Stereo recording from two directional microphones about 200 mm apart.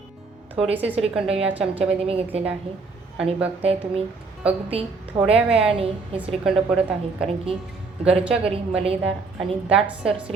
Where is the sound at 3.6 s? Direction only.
30° right (ahead or behind).